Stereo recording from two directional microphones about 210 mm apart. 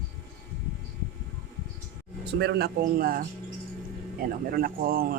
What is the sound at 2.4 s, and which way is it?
Speech, 50° right (ahead or behind).